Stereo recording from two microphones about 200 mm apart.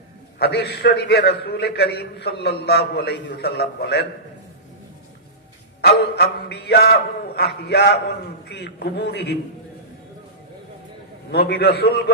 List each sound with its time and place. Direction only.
0.3 s a man's voice: 55° left (ahead or behind)
5.8 s music: 55° left (ahead or behind)
7.3 s a man's voice: 55° left (ahead or behind)
11.3 s a man's voice: 55° left (ahead or behind)